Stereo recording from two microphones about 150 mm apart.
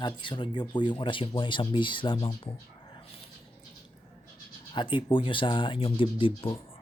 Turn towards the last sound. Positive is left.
turn(degrees=35)  # may be behind; listen again after turning